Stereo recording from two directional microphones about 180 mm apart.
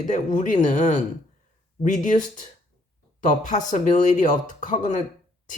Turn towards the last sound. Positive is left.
turn(degrees=45)  # may be behind; listen again after turning